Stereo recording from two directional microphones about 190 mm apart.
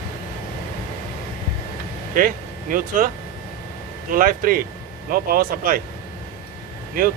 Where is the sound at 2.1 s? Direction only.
45° right (ahead or behind).